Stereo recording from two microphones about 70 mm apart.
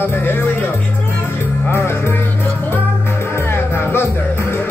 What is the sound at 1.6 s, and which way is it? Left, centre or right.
Music, left.